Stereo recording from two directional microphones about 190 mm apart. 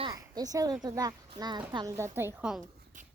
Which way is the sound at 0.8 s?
20° right (ahead or behind).